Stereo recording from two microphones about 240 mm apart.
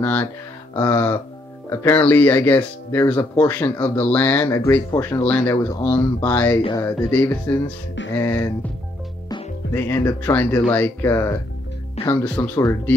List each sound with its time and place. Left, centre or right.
0.0 s speech: centre
6.6 s speech: centre
9.8 s speech: centre